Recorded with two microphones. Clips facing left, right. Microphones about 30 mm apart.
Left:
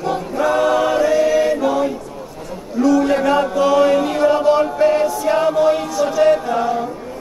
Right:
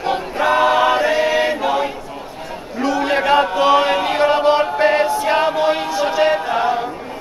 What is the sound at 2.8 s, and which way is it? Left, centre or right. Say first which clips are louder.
Chant: left 3 dB; right.